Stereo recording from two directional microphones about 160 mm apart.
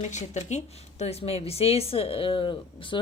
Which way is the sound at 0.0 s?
45° left (ahead or behind).